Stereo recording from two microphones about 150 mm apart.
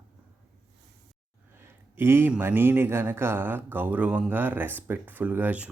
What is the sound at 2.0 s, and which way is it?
Speech, 15° right (ahead or behind).